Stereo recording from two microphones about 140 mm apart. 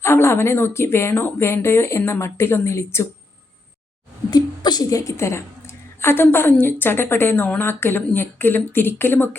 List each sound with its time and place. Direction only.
0.0 s a woman's voice: 20° left (ahead or behind)
4.3 s a woman's voice: 30° left (ahead or behind)